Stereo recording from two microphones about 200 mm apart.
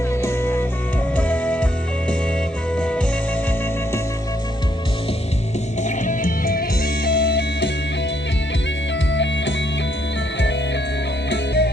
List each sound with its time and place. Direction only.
0.1 s music: 15° left (ahead or behind)
2.7 s music: 5° left (ahead or behind)
5.8 s music: 40° left (ahead or behind); by 7.7 s 60° left (ahead or behind)
9.1 s music: 65° left (ahead or behind)
11.3 s music: 55° left (ahead or behind)